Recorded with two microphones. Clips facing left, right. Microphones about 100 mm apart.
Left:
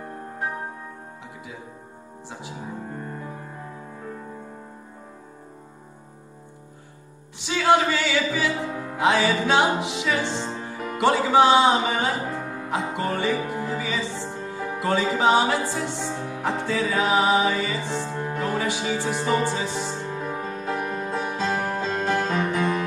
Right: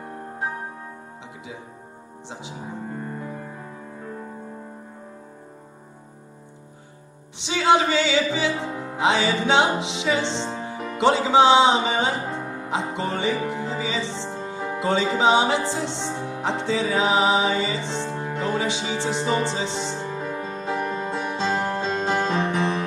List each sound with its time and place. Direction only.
7.3 s music: 20° right (ahead or behind)